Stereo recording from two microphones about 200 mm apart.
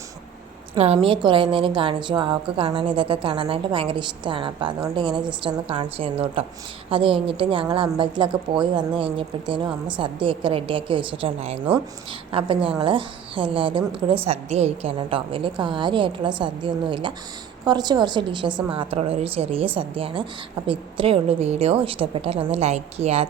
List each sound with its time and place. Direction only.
0.8 s a woman's voice: 30° right (ahead or behind)